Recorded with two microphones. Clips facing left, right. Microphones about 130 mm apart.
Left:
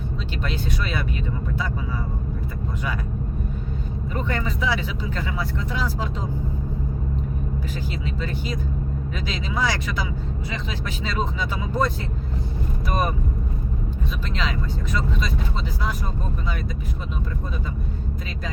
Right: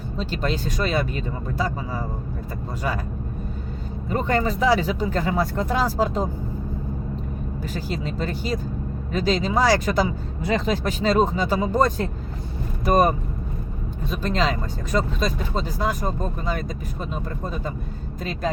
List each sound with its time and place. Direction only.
0.2 s speech: 40° right (ahead or behind)
4.1 s speech: 40° right (ahead or behind)
7.7 s speech: 40° right (ahead or behind)